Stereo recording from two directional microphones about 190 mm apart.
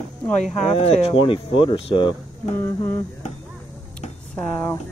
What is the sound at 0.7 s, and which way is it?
Speech, 30° left (ahead or behind).